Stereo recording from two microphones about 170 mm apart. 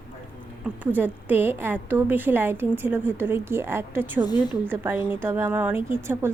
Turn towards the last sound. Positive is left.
turn(degrees=-15)  # may be behind; listen again after turning